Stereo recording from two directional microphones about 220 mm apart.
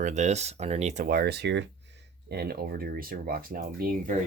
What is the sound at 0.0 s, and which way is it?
Speech, 30° right (ahead or behind).